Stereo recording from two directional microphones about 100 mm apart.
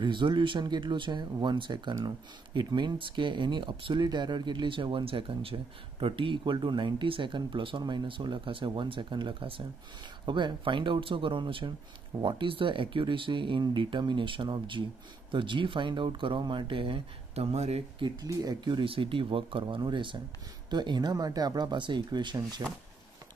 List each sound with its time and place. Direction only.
0.0 s speech: 50° right (ahead or behind)
10.2 s speech: 50° right (ahead or behind); by 18.0 s 85° right
18.0 s speech: 40° right (ahead or behind)